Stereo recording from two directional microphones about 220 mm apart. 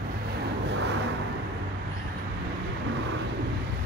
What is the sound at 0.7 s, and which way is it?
Vehicle, 50° right (ahead or behind).